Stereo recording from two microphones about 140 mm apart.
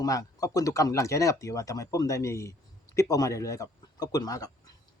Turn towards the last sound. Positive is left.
turn(degrees=25)  # may be behind; listen again after turning